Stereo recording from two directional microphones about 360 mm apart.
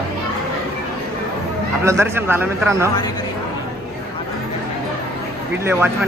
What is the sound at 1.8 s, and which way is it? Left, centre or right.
A man's voice, centre.